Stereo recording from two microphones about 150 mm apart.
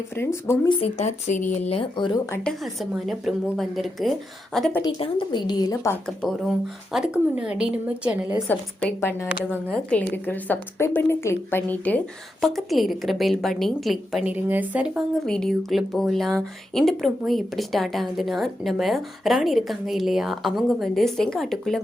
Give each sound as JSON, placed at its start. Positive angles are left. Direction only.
{"t": 0.2, "sound": "a woman's voice", "side_deg": 15}
{"t": 0.7, "sound": "speech", "side_deg": 45}
{"t": 1.7, "sound": "speech", "side_deg": 35}
{"t": 2.3, "sound": "speech", "side_deg": 5}
{"t": 4.8, "sound": "a woman's voice", "side_deg": 35}
{"t": 6.1, "sound": "a woman's voice", "side_deg": 0}
{"t": 8.4, "sound": "a woman's voice", "side_deg": 15}
{"t": 14.3, "sound": "a woman's voice", "side_deg": -10}
{"t": 15.3, "sound": "speech", "side_deg": 5}